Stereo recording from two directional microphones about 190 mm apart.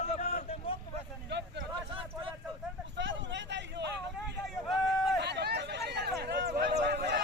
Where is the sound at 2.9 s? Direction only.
70° right (ahead or behind).